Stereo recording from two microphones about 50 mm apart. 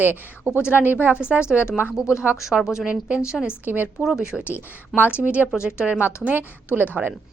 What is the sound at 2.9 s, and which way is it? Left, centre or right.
Speech, right.